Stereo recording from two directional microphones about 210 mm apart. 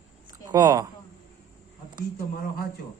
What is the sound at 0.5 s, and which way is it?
Speech, 20° right (ahead or behind).